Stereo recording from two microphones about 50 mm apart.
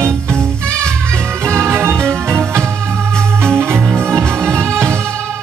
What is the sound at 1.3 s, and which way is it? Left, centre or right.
Music, right.